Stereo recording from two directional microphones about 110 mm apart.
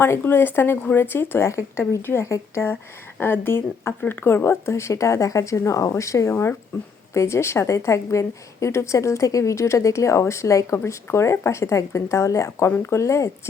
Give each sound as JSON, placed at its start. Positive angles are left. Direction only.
{"t": 0.0, "sound": "a woman's voice", "side_deg": 20}